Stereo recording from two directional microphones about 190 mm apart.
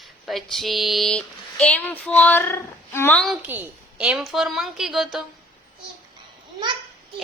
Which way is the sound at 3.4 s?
10° right (ahead or behind).